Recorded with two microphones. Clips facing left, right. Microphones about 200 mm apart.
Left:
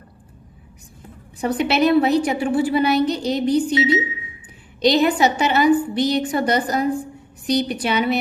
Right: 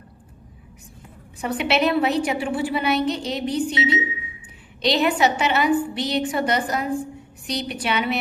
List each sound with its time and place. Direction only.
1.4 s a woman's voice: 40° left (ahead or behind)